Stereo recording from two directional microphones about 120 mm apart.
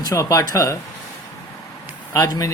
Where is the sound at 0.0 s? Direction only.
30° left (ahead or behind).